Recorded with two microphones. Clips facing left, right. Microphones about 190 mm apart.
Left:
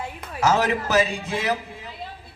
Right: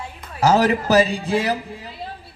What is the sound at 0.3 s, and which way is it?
A man's voice, 35° right (ahead or behind).